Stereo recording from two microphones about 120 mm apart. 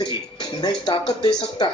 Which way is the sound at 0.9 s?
45° left (ahead or behind).